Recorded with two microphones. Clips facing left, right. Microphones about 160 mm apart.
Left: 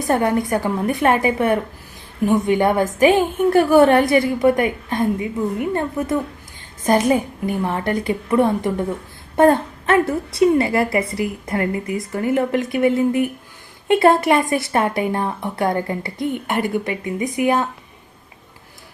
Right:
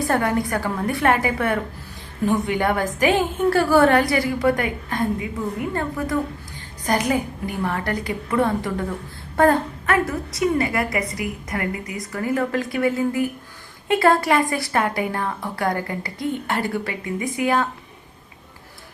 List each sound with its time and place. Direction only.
0.0 s a woman's voice: 20° left (ahead or behind)